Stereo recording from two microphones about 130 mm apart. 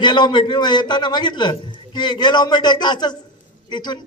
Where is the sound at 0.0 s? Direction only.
35° left (ahead or behind).